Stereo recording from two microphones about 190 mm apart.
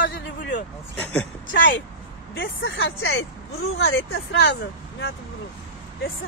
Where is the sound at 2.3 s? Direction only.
75° left (ahead or behind).